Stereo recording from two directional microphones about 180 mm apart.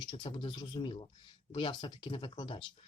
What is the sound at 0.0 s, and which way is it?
Speech, 25° left (ahead or behind).